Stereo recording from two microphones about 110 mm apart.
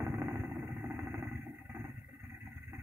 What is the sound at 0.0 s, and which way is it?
Vehicle, 25° right (ahead or behind).